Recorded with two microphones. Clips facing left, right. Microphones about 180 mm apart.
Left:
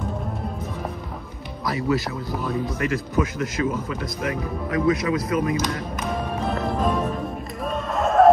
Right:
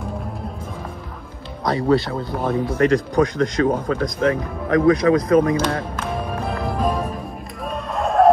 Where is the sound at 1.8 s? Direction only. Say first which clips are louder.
Right 5 dB; 30° right (ahead or behind).